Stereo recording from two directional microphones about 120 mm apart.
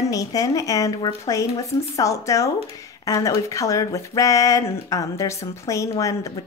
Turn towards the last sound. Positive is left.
turn(degrees=25)  # may be behind; listen again after turning